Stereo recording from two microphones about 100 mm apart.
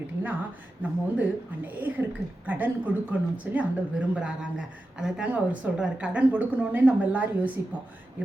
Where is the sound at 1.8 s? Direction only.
20° right (ahead or behind).